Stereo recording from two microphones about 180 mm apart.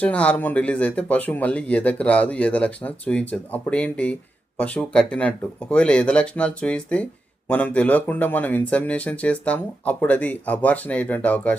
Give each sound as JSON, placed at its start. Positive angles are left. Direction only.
{"t": 0.0, "sound": "speech", "side_deg": 5}